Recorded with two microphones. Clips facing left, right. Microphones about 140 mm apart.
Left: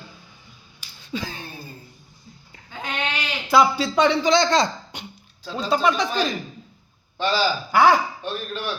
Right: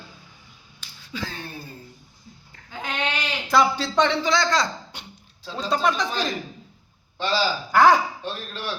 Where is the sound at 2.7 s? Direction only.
5° right (ahead or behind); by 5.1 s 20° left (ahead or behind).